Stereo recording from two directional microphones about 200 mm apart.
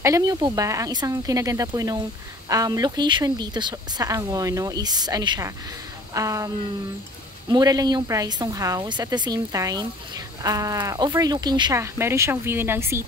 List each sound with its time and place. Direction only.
0.0 s speech: 15° right (ahead or behind)